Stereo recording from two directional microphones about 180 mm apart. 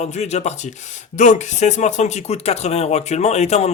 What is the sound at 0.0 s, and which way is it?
Speech, 40° left (ahead or behind).